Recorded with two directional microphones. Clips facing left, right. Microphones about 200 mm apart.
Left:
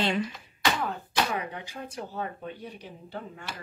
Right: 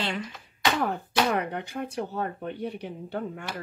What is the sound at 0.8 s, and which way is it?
Speech, 60° right (ahead or behind).